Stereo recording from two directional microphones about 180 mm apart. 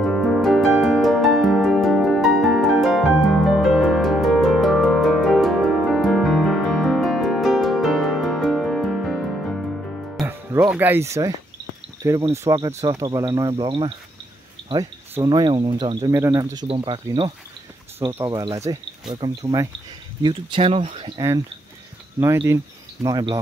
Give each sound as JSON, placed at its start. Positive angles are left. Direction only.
{"t": 0.0, "sound": "music", "side_deg": 0}
{"t": 10.2, "sound": "music", "side_deg": -15}
{"t": 12.0, "sound": "speech", "side_deg": -20}
{"t": 15.1, "sound": "speech", "side_deg": -25}
{"t": 23.0, "sound": "speech", "side_deg": -20}